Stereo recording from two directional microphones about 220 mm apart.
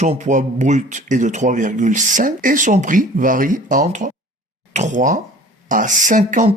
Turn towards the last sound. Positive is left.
turn(degrees=-35)  # may be behind; listen again after turning